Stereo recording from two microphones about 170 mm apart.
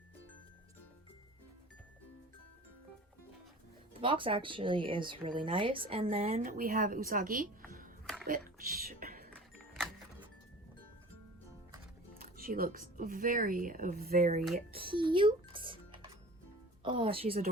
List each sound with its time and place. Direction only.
4.0 s speech: 30° right (ahead or behind)
6.4 s a woman's voice: 55° right (ahead or behind)
8.0 s a sound: 5° left (ahead or behind)
8.3 s whispering: 55° right (ahead or behind)
12.2 s speech: 55° right (ahead or behind)
14.8 s a child's voice: 30° right (ahead or behind)